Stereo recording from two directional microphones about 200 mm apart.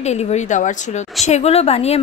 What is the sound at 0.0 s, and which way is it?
A woman's voice, 35° left (ahead or behind).